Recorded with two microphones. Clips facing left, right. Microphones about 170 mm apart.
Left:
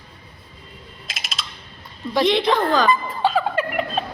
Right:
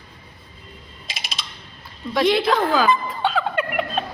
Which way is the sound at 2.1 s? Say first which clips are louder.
Even; centre (ahead or behind).